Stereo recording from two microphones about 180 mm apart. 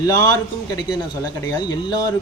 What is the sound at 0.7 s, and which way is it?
Speech, 25° left (ahead or behind).